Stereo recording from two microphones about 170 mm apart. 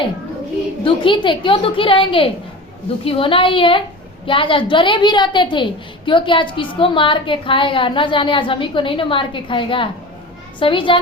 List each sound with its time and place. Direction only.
0.9 s a woman's voice: 30° left (ahead or behind)